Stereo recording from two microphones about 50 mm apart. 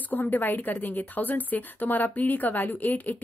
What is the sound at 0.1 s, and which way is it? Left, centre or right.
A woman's voice, left.